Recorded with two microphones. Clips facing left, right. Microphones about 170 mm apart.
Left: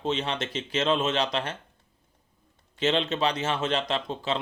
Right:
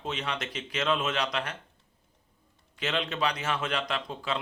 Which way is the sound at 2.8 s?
25° left (ahead or behind).